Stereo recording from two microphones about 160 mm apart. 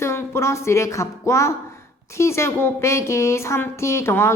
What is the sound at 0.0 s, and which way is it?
A woman's voice, 15° left (ahead or behind).